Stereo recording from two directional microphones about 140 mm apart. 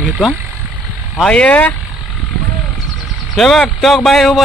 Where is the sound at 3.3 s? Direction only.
5° left (ahead or behind).